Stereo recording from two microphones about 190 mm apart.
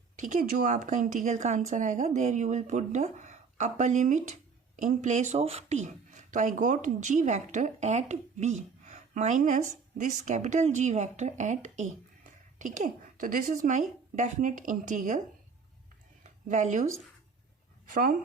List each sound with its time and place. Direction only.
0.2 s a woman's voice: 40° right (ahead or behind)
16.5 s a woman's voice: 40° right (ahead or behind)